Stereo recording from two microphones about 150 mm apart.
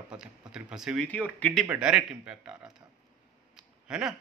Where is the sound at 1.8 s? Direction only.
5° right (ahead or behind).